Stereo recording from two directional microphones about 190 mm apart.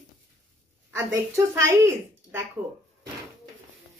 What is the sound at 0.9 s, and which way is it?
Speech, 15° right (ahead or behind).